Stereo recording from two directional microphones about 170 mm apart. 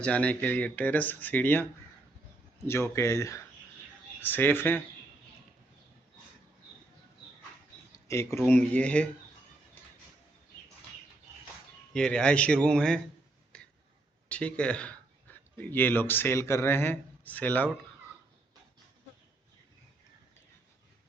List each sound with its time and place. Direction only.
0.0 s speech: 5° left (ahead or behind)
2.6 s speech: 15° left (ahead or behind)
7.9 s a sound: 15° left (ahead or behind)
8.4 s speech: 10° left (ahead or behind)
11.9 s speech: 5° left (ahead or behind)
13.5 s a sound: 5° left (ahead or behind)
14.3 s speech: 5° left (ahead or behind)